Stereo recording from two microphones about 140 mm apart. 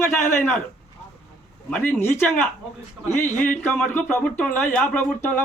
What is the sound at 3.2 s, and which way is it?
Speech, 70° left (ahead or behind).